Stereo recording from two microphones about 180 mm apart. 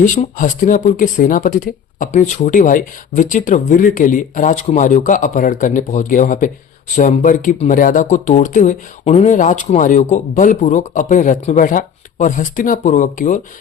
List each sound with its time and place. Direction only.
0.0 s speech: 45° left (ahead or behind)